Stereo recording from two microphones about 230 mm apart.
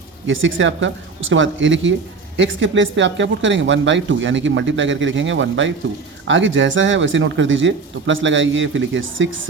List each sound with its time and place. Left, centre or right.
0.3 s speech: right